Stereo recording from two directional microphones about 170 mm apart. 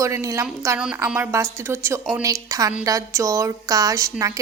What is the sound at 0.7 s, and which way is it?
A woman's voice, 5° right (ahead or behind).